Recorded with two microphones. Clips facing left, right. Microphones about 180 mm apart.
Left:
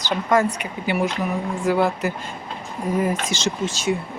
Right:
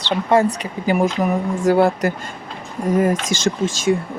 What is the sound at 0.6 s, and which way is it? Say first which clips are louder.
Speech: right 5 dB; 40° right (ahead or behind).